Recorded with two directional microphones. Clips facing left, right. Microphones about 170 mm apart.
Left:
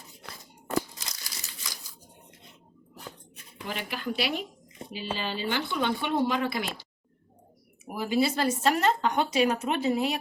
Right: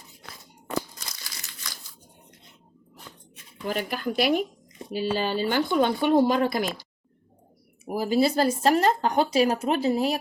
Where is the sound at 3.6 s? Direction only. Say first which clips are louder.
Right 5 dB; 45° right (ahead or behind).